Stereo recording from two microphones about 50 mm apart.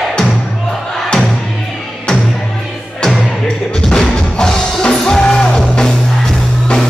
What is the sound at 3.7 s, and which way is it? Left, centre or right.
Music, centre.